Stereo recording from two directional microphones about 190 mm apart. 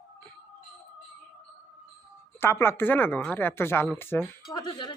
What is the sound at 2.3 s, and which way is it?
Speech, 10° left (ahead or behind).